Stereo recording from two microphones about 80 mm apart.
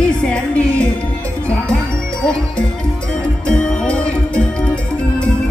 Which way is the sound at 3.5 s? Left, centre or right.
Centre.